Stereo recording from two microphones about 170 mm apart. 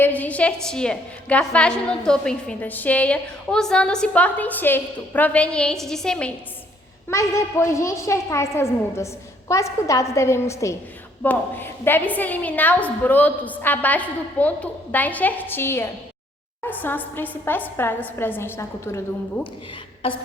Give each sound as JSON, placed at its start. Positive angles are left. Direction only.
{"t": 0.0, "sound": "a woman's voice", "side_deg": 10}
{"t": 7.1, "sound": "a woman's voice", "side_deg": 15}
{"t": 20.0, "sound": "a sound", "side_deg": 30}